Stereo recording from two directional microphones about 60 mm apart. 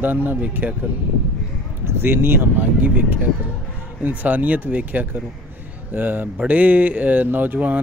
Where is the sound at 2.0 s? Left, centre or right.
Right.